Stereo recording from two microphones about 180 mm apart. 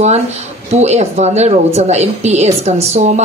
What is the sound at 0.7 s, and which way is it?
A woman's voice, 40° right (ahead or behind).